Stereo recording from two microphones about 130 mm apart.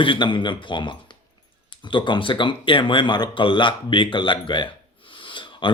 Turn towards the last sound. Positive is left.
turn(degrees=40)  # may be behind; listen again after turning